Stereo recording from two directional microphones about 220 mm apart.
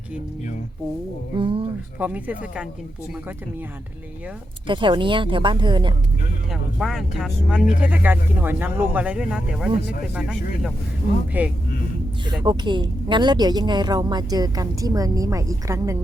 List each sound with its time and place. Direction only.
1.4 s speech: 25° right (ahead or behind)
2.0 s speech: 5° right (ahead or behind)
4.6 s speech: 20° right (ahead or behind)
6.5 s speech: centre (ahead or behind)
12.5 s speech: 20° right (ahead or behind)